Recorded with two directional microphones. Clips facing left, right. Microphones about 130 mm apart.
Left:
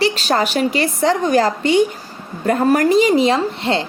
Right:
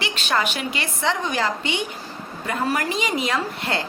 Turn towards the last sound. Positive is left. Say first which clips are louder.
# left 7 dB
turn(degrees=25)  # may be behind; listen again after turning